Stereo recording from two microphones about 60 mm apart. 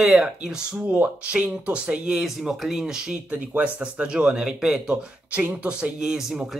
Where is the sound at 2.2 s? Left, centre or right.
Centre.